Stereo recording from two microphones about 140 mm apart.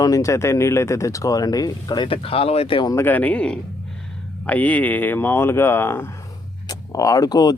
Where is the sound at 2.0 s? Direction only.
40° left (ahead or behind).